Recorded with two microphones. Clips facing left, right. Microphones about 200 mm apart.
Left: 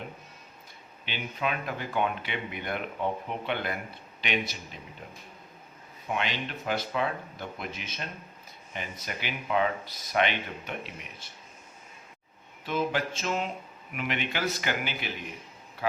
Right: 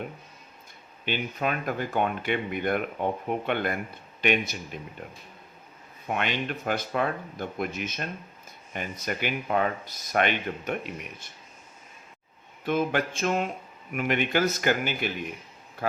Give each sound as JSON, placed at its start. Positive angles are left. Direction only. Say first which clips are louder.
{"t": 1.0, "sound": "speech", "louder": "right 4 dB", "side_deg": -45}
{"t": 6.1, "sound": "speech", "louder": "right 3 dB", "side_deg": -55}
{"t": 12.6, "sound": "speech", "louder": "right 3 dB", "side_deg": -55}